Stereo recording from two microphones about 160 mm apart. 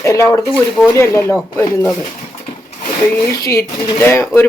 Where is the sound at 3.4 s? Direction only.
20° left (ahead or behind).